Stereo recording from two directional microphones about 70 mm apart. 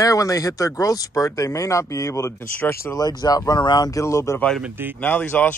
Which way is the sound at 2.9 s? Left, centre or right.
Left.